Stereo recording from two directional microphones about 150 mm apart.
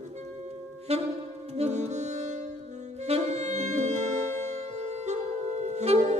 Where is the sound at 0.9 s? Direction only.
45° right (ahead or behind).